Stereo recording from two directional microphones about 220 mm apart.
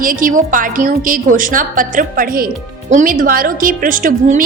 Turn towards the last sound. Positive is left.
turn(degrees=-40)  # may be behind; listen again after turning